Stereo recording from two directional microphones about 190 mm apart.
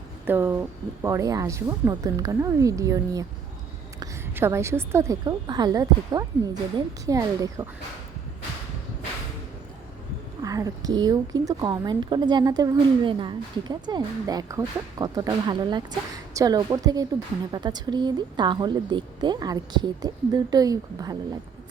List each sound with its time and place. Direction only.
0.3 s a woman's voice: 10° right (ahead or behind)
10.4 s a woman's voice: 20° right (ahead or behind)